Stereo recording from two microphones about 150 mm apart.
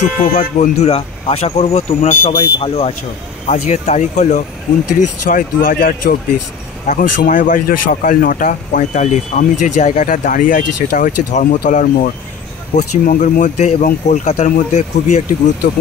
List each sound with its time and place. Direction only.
0.0 s speech: 55° left (ahead or behind)
5.3 s speech: 65° left (ahead or behind); by 6.1 s 80° left
6.9 s speech: 60° left (ahead or behind)